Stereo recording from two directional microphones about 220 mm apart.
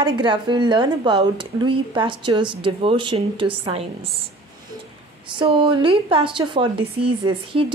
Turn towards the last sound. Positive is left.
turn(degrees=-25)  # may be behind; listen again after turning